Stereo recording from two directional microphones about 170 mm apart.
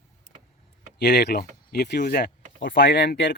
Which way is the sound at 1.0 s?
80° left.